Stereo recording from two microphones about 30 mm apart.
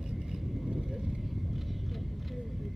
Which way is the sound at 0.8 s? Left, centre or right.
Centre.